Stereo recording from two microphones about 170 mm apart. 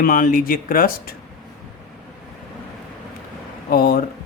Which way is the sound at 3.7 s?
60° left (ahead or behind).